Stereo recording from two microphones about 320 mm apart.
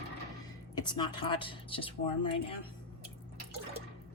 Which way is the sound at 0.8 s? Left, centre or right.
Centre.